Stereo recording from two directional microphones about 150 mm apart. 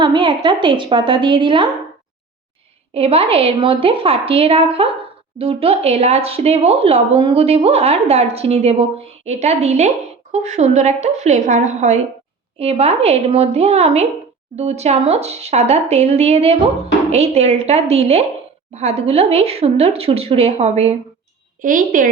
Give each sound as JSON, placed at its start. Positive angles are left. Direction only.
{"t": 0.0, "sound": "a woman's voice", "side_deg": -30}
{"t": 2.9, "sound": "a woman's voice", "side_deg": -40}
{"t": 21.6, "sound": "a woman's voice", "side_deg": -65}